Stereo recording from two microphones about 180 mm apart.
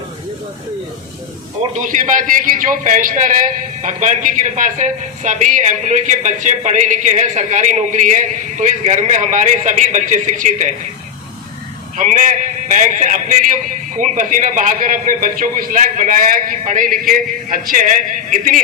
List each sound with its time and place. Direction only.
1.7 s a man's voice: 45° right (ahead or behind)
11.9 s a man's voice: 45° right (ahead or behind)